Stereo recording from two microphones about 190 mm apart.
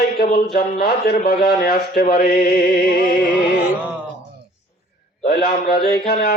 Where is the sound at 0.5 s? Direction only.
55° left (ahead or behind).